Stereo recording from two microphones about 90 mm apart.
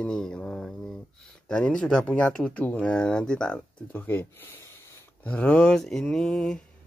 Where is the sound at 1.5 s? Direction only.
10° left (ahead or behind).